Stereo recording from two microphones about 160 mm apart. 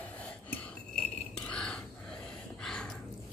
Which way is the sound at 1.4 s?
5° left (ahead or behind).